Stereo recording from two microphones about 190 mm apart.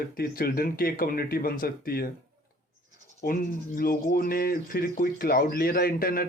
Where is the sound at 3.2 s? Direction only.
45° left (ahead or behind).